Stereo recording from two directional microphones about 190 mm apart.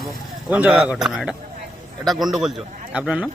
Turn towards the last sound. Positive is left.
turn(degrees=-5)  # may be behind; listen again after turning